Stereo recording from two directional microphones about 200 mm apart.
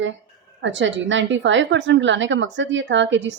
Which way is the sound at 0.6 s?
65° right (ahead or behind).